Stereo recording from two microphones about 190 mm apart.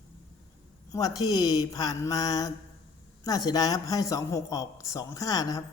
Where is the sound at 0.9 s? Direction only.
20° left (ahead or behind).